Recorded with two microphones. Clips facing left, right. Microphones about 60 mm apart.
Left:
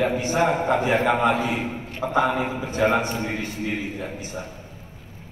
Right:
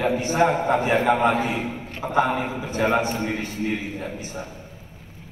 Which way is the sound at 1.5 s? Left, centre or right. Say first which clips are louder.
Even; left.